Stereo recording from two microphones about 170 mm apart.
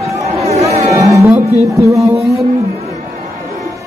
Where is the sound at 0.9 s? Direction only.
20° right (ahead or behind).